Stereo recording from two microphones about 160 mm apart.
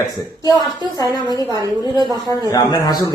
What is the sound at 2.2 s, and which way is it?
Speech, 25° left (ahead or behind).